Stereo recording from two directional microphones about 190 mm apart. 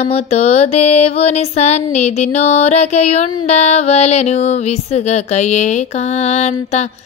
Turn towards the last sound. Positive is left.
turn(degrees=35)  # may be behind; listen again after turning